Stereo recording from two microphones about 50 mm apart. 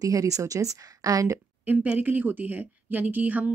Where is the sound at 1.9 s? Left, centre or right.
Right.